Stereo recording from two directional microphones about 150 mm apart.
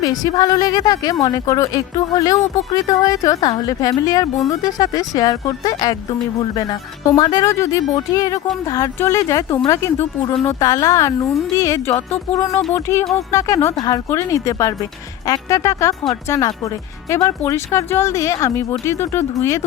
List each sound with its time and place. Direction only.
0.0 s speech: 25° left (ahead or behind)